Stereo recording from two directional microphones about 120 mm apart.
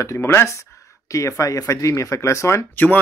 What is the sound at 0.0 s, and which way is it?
Speech, 20° left (ahead or behind).